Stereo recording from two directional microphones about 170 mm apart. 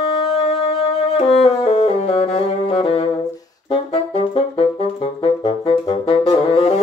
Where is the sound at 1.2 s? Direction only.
35° left (ahead or behind).